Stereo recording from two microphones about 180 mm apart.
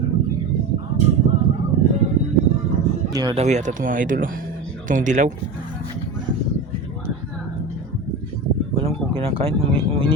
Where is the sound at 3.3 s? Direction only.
40° right (ahead or behind).